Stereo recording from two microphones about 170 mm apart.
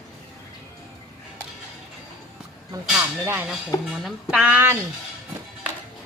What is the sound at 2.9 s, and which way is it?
Speech, 15° right (ahead or behind).